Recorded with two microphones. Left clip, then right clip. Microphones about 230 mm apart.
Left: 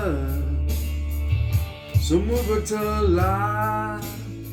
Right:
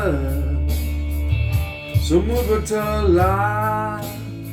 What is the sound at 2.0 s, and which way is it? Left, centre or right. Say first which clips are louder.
Music: right 4 dB; centre.